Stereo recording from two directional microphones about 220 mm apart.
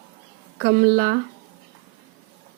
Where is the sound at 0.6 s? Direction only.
45° right (ahead or behind).